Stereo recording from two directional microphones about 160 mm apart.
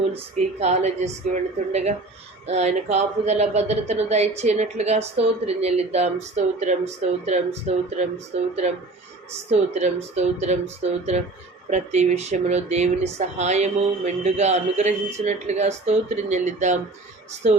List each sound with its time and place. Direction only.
0.3 s speech: 45° right (ahead or behind)